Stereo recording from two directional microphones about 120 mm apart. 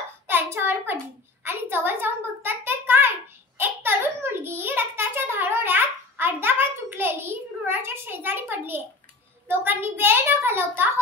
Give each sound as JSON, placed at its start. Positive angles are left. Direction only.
{"t": 0.3, "sound": "child singing", "side_deg": -20}
{"t": 1.4, "sound": "a sound", "side_deg": -20}
{"t": 9.5, "sound": "a child's voice", "side_deg": -15}